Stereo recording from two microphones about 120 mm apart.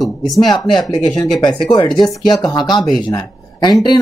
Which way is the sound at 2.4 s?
35° left (ahead or behind).